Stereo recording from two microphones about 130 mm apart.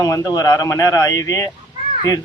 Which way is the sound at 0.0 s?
25° left (ahead or behind).